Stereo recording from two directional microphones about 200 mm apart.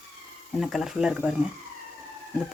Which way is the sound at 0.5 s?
Centre (ahead or behind).